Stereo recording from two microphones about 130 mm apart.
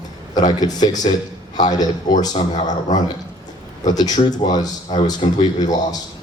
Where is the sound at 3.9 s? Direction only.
30° left (ahead or behind).